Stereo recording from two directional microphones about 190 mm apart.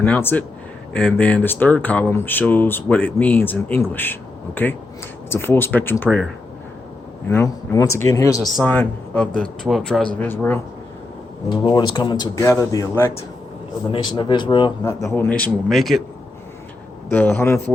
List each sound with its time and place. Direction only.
0.0 s speech: 10° left (ahead or behind)
7.3 s speech: 15° left (ahead or behind)
11.5 s speech: 25° left (ahead or behind)
13.9 s speech: 25° left (ahead or behind); by 16.0 s centre (ahead or behind)
17.1 s speech: 10° left (ahead or behind)